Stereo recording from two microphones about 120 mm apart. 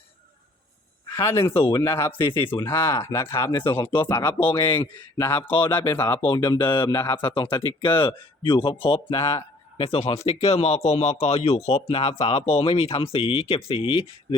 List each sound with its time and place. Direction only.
1.1 s speech: 20° left (ahead or behind)
4.4 s speech: 40° left (ahead or behind)
4.7 s speech: 20° left (ahead or behind)
5.4 s speech: 45° left (ahead or behind)
5.9 s speech: 20° left (ahead or behind)
6.2 s speech: 40° left (ahead or behind)
6.9 s speech: 20° left (ahead or behind)
7.6 s a man's voice: 45° left (ahead or behind)